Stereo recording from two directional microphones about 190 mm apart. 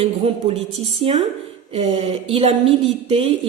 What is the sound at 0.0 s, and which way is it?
A woman's voice, 30° right (ahead or behind).